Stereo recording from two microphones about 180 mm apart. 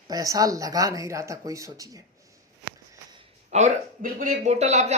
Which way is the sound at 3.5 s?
40° right (ahead or behind).